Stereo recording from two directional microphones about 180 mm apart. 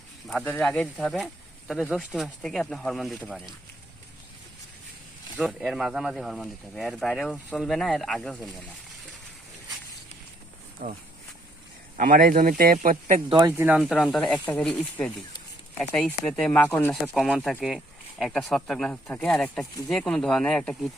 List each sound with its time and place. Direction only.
0.3 s speech: 10° left (ahead or behind)
5.4 s speech: centre (ahead or behind)
10.8 s speech: 55° right (ahead or behind)
13.2 s speech: 25° right (ahead or behind)
13.6 s speech: 10° right (ahead or behind)
13.9 s speech: centre (ahead or behind)